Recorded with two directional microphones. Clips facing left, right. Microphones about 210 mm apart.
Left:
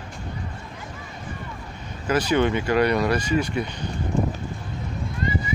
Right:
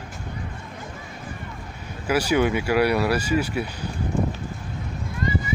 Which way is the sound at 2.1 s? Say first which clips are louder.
Even; 10° right (ahead or behind).